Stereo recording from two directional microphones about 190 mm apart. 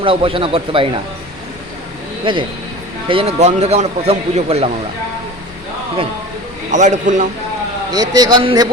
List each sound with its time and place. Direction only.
0.0 s speech: 30° right (ahead or behind)
2.2 s speech: 25° right (ahead or behind)
6.7 s speech: 40° right (ahead or behind)
7.9 s speech: 20° right (ahead or behind)